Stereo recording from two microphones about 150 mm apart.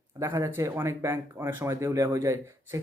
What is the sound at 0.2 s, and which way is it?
Speech, 20° right (ahead or behind).